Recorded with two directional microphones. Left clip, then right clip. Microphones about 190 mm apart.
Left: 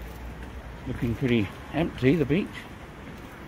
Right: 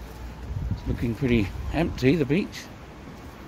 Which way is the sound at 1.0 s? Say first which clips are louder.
Right 1 dB; 15° right (ahead or behind).